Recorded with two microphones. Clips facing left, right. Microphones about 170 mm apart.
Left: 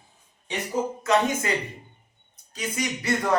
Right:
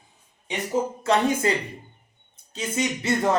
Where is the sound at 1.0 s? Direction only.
30° right (ahead or behind).